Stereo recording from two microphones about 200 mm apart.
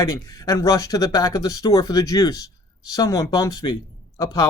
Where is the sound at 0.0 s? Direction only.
15° left (ahead or behind).